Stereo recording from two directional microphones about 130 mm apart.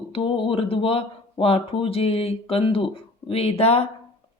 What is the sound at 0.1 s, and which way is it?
Speech, 40° left (ahead or behind).